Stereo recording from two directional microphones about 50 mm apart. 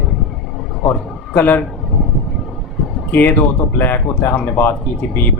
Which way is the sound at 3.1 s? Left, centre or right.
Left.